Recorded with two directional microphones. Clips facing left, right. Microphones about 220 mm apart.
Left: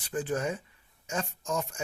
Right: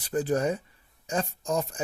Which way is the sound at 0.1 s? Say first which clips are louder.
Right 5 dB; 40° right (ahead or behind).